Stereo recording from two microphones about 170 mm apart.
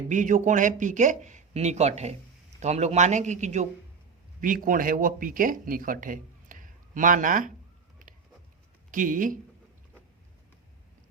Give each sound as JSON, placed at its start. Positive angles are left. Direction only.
{"t": 0.1, "sound": "speech", "side_deg": -50}
{"t": 8.9, "sound": "speech", "side_deg": -50}